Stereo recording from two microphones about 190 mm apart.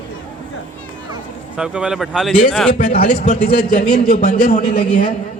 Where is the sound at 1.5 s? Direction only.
5° right (ahead or behind).